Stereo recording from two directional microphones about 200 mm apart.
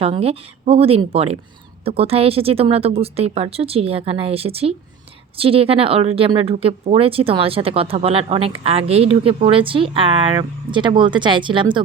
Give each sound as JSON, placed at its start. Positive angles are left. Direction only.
{"t": 0.0, "sound": "speech", "side_deg": -30}